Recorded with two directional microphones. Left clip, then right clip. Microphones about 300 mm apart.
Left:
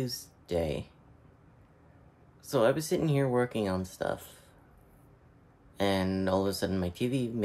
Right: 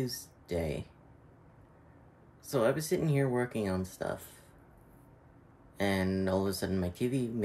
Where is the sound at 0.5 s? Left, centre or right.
Centre.